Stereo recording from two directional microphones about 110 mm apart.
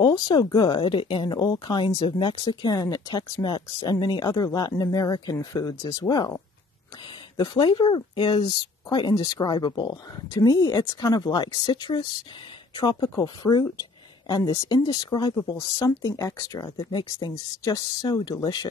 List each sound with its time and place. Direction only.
0.0 s speech: 40° left (ahead or behind)
7.3 s speech: 40° left (ahead or behind)